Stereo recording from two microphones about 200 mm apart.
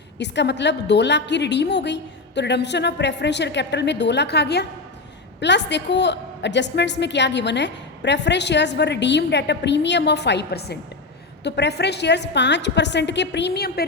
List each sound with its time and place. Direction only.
0.2 s a woman's voice: 60° left (ahead or behind)